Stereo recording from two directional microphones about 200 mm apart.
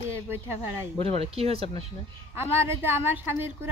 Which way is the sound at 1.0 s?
30° right (ahead or behind).